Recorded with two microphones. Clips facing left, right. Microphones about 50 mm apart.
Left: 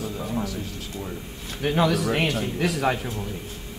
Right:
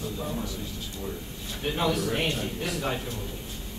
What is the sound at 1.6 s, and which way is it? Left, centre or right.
A man's voice, left.